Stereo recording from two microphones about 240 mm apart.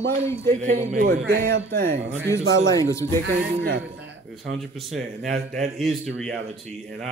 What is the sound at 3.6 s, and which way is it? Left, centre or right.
Speech, right.